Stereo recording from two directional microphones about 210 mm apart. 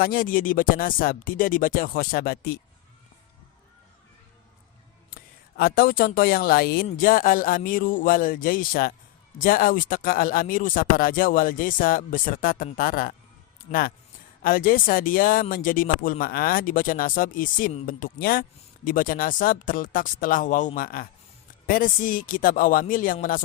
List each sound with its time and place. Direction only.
0.0 s speech: 45° left (ahead or behind)
5.1 s speech: 45° left (ahead or behind)